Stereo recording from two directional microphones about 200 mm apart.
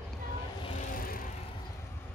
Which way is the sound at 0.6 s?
40° left (ahead or behind).